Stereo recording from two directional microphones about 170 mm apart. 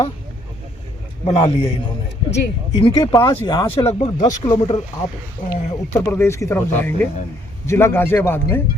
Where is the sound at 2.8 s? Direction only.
30° left (ahead or behind).